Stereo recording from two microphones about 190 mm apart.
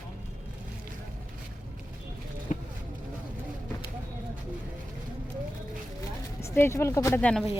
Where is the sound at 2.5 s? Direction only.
40° left (ahead or behind).